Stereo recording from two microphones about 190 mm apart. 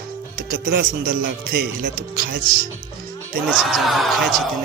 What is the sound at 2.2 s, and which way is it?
Speech, 55° right (ahead or behind).